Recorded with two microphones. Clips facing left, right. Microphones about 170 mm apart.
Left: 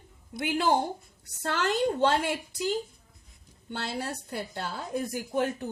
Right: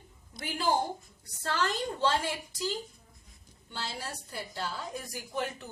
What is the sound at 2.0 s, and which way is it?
Speech, 60° left (ahead or behind).